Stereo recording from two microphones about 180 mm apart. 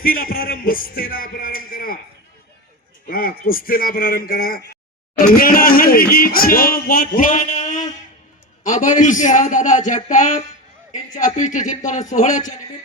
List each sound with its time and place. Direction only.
0.0 s speech: 55° left (ahead or behind)
3.1 s speech: 55° left (ahead or behind)